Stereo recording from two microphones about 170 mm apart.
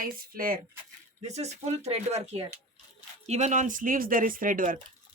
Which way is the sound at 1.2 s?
40° right (ahead or behind).